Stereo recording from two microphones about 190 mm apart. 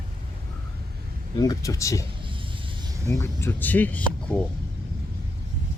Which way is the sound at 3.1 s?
15° left (ahead or behind).